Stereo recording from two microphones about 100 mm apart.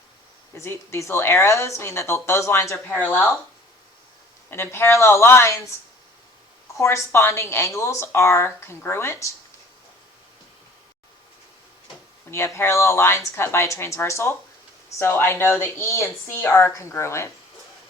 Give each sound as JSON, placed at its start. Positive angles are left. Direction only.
{"t": 0.5, "sound": "speech", "side_deg": 25}
{"t": 4.4, "sound": "speech", "side_deg": 25}
{"t": 6.7, "sound": "speech", "side_deg": 25}
{"t": 12.5, "sound": "speech", "side_deg": 25}